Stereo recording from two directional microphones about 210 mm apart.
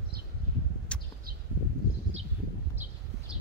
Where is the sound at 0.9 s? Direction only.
5° left (ahead or behind).